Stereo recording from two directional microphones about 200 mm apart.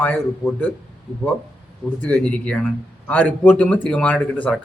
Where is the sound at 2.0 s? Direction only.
5° left (ahead or behind).